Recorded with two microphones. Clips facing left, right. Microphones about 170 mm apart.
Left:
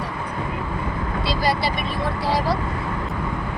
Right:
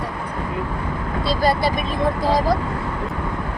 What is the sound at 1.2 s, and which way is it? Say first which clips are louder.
Speech: right 4 dB; 50° right (ahead or behind).